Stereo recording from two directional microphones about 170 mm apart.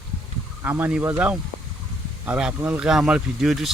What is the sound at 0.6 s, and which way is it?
Speech, 10° right (ahead or behind).